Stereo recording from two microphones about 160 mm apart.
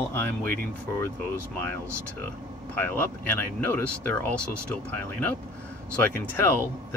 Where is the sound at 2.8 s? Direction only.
15° left (ahead or behind).